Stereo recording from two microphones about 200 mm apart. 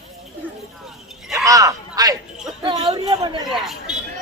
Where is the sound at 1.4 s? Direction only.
15° right (ahead or behind).